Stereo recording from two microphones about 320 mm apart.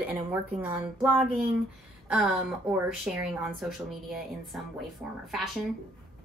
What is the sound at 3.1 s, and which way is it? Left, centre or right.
A woman's voice, centre.